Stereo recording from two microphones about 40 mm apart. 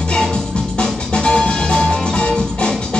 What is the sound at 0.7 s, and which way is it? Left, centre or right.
Music, left.